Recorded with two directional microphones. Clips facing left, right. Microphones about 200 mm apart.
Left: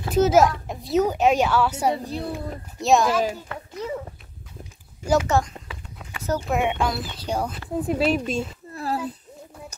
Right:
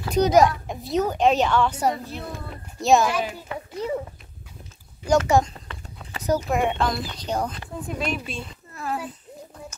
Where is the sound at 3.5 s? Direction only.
15° right (ahead or behind).